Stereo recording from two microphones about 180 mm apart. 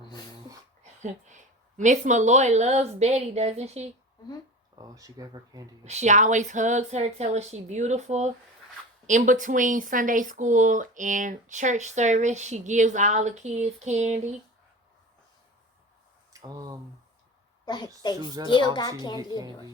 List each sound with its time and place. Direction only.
0.8 s speech: 40° right (ahead or behind)
4.8 s speech: 20° right (ahead or behind)
5.8 s a woman's voice: 40° right (ahead or behind)
16.3 s speech: 20° right (ahead or behind)
18.0 s a child's voice: 25° left (ahead or behind)
19.4 s speech: 20° right (ahead or behind)